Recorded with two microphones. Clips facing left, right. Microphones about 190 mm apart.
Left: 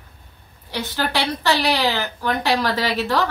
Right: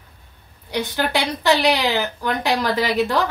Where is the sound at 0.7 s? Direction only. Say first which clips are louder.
Right 2 dB; 15° right (ahead or behind).